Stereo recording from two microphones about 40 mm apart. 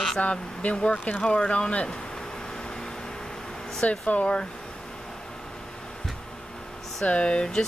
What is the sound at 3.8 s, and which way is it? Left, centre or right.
Speech, left.